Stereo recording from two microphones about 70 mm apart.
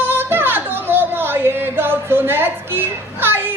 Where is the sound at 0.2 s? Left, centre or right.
Right.